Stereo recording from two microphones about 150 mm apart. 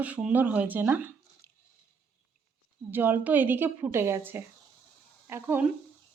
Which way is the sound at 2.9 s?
15° right (ahead or behind).